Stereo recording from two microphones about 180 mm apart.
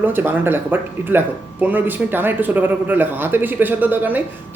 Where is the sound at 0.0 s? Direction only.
10° right (ahead or behind).